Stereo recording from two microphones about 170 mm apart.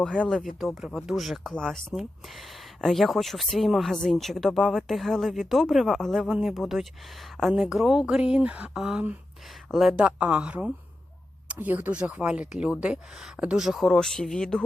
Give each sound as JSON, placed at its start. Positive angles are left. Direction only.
{"t": 0.3, "sound": "speech", "side_deg": 0}